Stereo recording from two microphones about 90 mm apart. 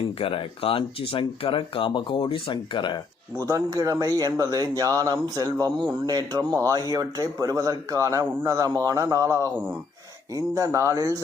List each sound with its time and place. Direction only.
0.2 s speech: 90° left; by 3.0 s 60° left (ahead or behind)
3.7 s speech: 45° right (ahead or behind)
6.5 s speech: 35° right (ahead or behind)